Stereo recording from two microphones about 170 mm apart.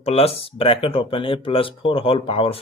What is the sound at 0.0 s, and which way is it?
Speech, 35° left (ahead or behind).